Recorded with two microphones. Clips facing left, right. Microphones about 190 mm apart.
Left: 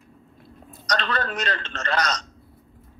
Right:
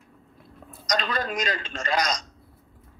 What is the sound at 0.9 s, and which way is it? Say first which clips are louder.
Speech: left 1 dB; 10° right (ahead or behind).